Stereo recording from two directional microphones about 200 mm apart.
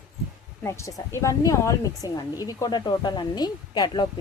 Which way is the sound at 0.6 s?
15° left (ahead or behind).